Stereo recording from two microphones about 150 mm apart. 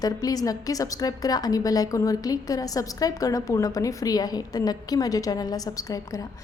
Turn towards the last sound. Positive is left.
turn(degrees=25)  # may be behind; listen again after turning